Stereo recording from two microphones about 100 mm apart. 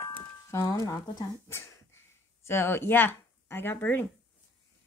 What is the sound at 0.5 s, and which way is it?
Speech, 35° left (ahead or behind).